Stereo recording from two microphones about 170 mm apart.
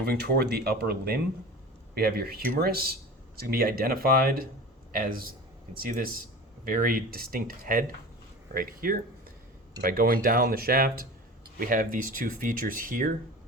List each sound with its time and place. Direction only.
0.0 s a man's voice: 65° right (ahead or behind)